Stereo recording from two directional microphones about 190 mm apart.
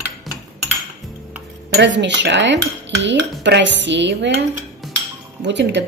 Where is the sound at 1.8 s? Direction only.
65° right (ahead or behind).